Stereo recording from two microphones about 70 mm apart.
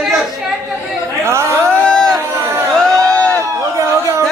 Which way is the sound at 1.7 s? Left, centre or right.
Centre.